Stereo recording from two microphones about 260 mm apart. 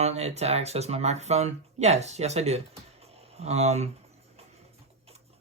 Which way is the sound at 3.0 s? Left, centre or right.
Right.